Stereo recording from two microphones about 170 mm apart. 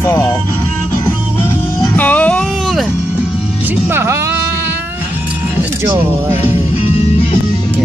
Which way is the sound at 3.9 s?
15° right (ahead or behind).